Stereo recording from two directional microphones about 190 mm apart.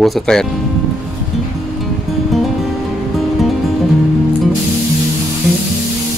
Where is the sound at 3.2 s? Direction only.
Centre (ahead or behind).